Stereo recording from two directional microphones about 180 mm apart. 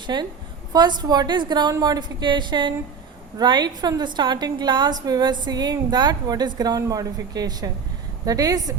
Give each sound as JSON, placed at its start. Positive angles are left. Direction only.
{"t": 0.1, "sound": "a woman's voice", "side_deg": -25}